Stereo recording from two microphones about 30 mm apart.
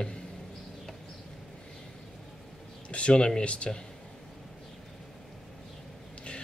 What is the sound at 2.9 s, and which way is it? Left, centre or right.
Speech, left.